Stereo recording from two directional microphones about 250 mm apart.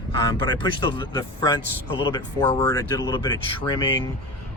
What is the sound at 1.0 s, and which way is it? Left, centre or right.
Speech, centre.